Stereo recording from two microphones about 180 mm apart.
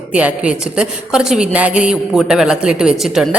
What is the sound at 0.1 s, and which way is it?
A woman's voice, 5° right (ahead or behind).